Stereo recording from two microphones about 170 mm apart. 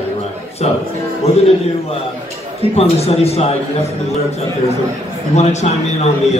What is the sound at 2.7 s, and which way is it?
Speech, 35° left (ahead or behind).